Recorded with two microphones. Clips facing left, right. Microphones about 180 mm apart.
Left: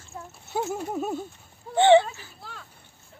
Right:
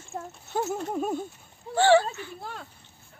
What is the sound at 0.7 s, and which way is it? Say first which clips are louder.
Speech: even; 5° left (ahead or behind).